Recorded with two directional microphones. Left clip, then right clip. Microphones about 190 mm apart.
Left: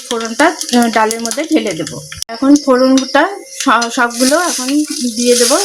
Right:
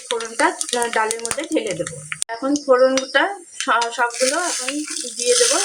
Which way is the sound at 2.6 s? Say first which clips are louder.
Left 4 dB; 55° left (ahead or behind).